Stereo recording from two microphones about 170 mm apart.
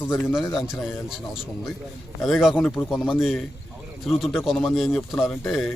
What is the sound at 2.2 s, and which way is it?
A man's voice, centre (ahead or behind).